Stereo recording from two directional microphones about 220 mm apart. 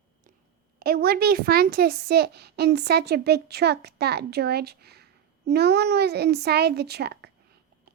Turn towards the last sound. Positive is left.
turn(degrees=-45)  # may be behind; listen again after turning